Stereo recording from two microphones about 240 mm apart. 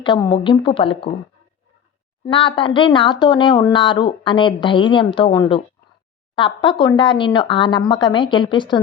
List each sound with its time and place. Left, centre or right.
0.0 s speech: centre
2.2 s speech: left